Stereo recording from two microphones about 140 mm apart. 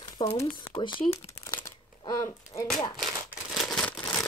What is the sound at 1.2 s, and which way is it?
Crumpling, 20° left (ahead or behind).